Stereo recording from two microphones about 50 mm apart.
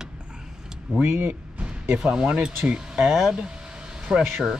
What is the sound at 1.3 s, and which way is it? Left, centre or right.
Music, right.